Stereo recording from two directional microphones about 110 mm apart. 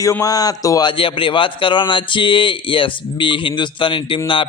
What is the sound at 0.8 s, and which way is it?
Speech, 50° left (ahead or behind).